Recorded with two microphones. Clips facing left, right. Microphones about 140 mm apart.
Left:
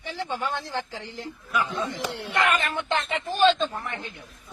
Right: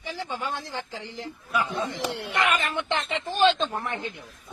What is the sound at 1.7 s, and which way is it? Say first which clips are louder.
Speech: right 1 dB; 15° right (ahead or behind).